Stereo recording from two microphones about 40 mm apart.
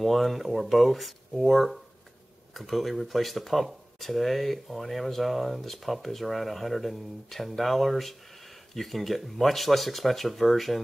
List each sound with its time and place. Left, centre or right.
0.0 s speech: centre